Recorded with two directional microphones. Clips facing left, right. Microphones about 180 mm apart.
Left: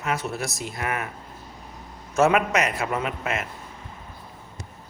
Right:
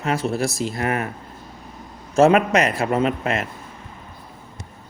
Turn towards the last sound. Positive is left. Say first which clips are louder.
# right 7 dB
turn(degrees=-30)  # may be behind; listen again after turning